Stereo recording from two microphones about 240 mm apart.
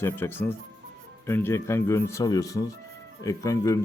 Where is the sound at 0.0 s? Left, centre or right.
Centre.